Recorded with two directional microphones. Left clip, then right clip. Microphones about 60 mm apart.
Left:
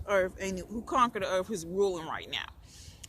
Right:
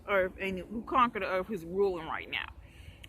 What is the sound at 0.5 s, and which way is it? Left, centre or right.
Speech, left.